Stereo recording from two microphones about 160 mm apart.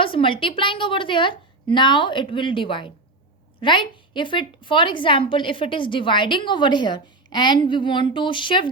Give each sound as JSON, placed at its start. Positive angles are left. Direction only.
{"t": 0.0, "sound": "a woman's voice", "side_deg": 35}